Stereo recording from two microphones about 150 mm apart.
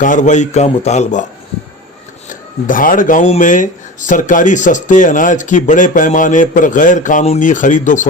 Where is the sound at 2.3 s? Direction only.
65° left (ahead or behind).